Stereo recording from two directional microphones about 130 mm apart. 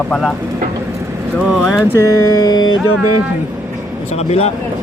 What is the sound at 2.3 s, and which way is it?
Music, 30° left (ahead or behind).